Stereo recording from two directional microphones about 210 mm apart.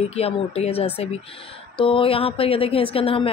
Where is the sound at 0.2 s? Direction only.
30° left (ahead or behind).